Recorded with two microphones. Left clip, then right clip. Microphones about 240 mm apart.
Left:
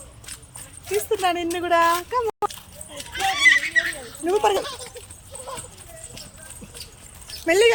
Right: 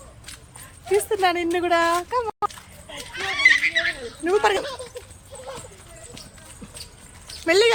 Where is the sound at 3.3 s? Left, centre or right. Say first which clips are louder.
Even; left.